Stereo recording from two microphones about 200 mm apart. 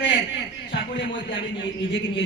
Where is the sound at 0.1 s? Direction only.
60° left (ahead or behind).